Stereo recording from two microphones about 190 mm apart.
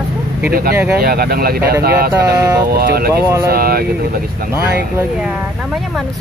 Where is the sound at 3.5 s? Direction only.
50° right (ahead or behind).